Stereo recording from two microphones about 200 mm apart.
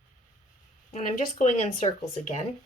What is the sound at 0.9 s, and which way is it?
Speech, 35° left (ahead or behind).